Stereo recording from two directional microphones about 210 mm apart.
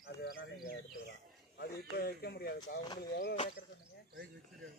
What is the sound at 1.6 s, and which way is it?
Speech, 45° left (ahead or behind).